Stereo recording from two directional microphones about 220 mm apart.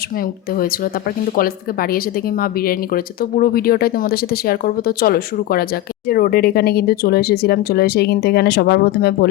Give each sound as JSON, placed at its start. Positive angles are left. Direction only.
{"t": 1.4, "sound": "speech", "side_deg": 40}